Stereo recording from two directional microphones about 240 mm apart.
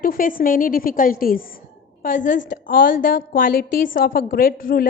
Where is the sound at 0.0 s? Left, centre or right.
Left.